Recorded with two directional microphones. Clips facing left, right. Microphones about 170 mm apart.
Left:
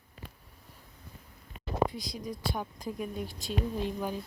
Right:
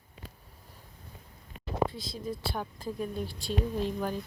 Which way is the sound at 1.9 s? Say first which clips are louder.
Right 1 dB; 15° left (ahead or behind).